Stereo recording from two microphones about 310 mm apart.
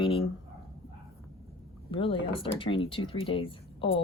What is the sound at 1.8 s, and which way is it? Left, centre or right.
Speech, centre.